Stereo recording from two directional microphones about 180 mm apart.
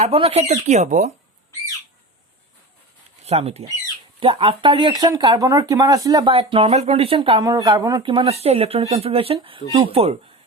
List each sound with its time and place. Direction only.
0.0 s speech: 35° right (ahead or behind)
3.2 s speech: 35° right (ahead or behind)
6.3 s speech: 30° right (ahead or behind)
7.4 s speech: 20° right (ahead or behind); by 10.2 s 35° right (ahead or behind)